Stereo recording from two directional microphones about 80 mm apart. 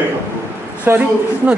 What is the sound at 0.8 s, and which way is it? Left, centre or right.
Speech, right.